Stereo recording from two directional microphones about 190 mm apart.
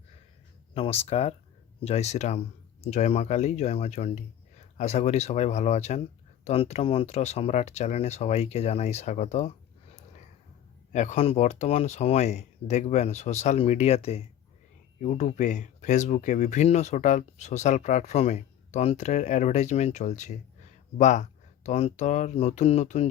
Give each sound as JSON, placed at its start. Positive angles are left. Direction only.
{"t": 0.7, "sound": "speech", "side_deg": 30}
{"t": 9.9, "sound": "a sound", "side_deg": 40}
{"t": 10.9, "sound": "speech", "side_deg": 40}